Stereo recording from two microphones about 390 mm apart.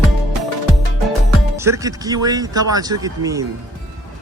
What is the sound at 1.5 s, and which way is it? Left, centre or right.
Speech, centre.